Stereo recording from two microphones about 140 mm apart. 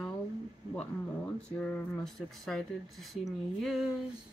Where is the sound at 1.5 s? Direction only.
10° left (ahead or behind).